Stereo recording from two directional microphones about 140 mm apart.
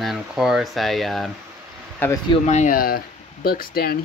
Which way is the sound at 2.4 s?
55° left (ahead or behind).